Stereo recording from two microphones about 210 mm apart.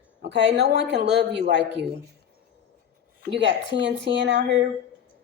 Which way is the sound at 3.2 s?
60° right (ahead or behind).